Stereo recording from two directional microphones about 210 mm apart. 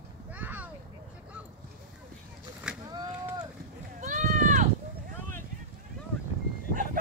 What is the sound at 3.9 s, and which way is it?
Run, 35° right (ahead or behind).